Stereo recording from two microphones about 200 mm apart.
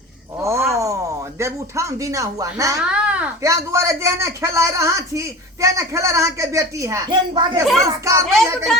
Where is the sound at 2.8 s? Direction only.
5° right (ahead or behind).